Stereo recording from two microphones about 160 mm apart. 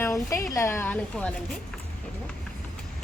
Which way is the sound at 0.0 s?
20° left (ahead or behind).